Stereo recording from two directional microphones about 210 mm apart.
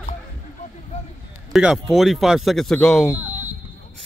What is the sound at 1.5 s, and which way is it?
Speech, centre (ahead or behind).